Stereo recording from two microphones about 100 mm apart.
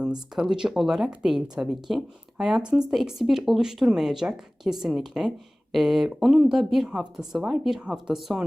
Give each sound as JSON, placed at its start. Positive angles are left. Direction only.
{"t": 0.3, "sound": "speech", "side_deg": -5}